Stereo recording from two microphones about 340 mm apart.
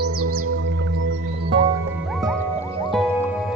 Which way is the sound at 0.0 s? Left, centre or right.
Right.